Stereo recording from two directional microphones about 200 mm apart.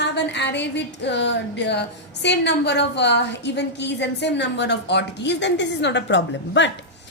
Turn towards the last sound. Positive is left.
turn(degrees=65)  # may be behind; listen again after turning